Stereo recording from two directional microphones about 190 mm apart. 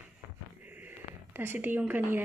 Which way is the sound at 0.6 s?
10° right (ahead or behind).